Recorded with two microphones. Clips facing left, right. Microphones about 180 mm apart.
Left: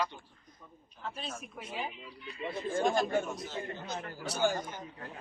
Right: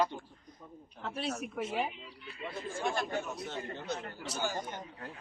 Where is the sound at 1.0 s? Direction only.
70° right (ahead or behind).